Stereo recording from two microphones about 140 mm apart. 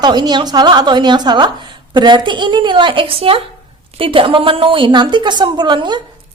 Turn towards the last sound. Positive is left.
turn(degrees=-30)  # may be behind; listen again after turning